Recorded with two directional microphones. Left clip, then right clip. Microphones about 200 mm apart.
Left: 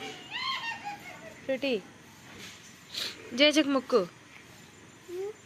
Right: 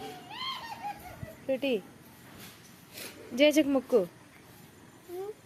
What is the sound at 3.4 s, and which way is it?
Speech, 15° right (ahead or behind).